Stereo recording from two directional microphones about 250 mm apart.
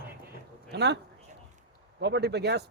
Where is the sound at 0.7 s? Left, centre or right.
Right.